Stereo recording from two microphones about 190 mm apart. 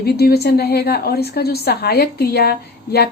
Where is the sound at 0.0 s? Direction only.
55° left (ahead or behind).